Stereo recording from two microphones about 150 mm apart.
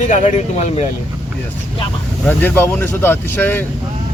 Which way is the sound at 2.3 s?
15° left (ahead or behind).